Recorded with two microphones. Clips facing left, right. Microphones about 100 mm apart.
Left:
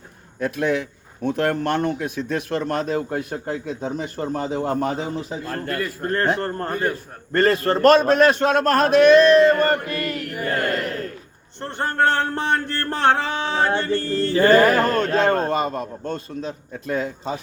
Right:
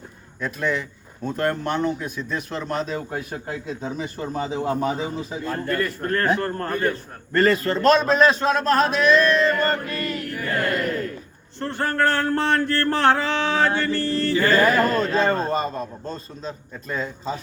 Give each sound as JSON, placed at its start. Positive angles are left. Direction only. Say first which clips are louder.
{"t": 0.3, "sound": "a man's voice", "louder": "left 3 dB", "side_deg": 60}
{"t": 6.0, "sound": "a man's voice", "louder": "left 3 dB", "side_deg": 30}
{"t": 7.3, "sound": "a man's voice", "louder": "left 1 dB", "side_deg": 45}
{"t": 11.6, "sound": "a sound", "louder": "left 1 dB", "side_deg": 25}
{"t": 14.5, "sound": "a man's voice", "louder": "left 2 dB", "side_deg": 60}